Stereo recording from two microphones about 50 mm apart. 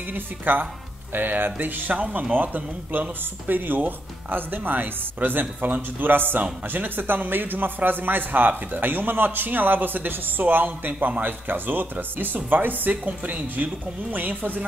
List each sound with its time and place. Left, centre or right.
0.1 s a man's voice: right